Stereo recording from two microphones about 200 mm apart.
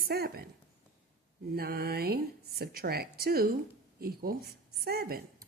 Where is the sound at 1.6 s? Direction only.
50° right (ahead or behind).